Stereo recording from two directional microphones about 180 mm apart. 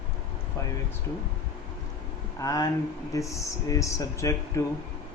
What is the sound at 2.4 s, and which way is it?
Speech, 20° left (ahead or behind).